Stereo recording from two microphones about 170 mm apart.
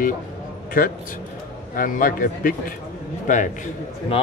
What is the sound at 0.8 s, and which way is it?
Speech, 50° left (ahead or behind).